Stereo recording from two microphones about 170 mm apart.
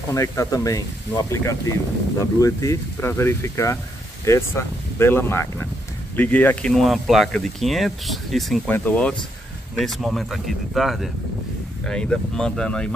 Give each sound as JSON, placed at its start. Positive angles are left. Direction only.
{"t": 0.1, "sound": "speech", "side_deg": 20}